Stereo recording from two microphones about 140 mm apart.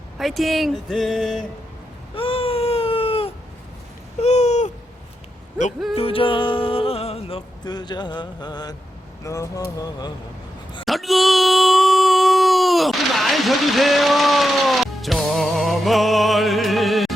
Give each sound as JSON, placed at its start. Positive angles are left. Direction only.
{"t": 0.2, "sound": "speech", "side_deg": 0}
{"t": 2.1, "sound": "baby cry", "side_deg": 40}
{"t": 4.2, "sound": "owl", "side_deg": 50}
{"t": 5.9, "sound": "a sound", "side_deg": 40}
{"t": 9.2, "sound": "speech", "side_deg": 25}
{"t": 10.8, "sound": "a sound", "side_deg": 0}